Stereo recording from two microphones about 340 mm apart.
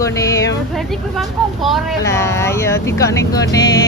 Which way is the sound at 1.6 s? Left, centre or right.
Centre.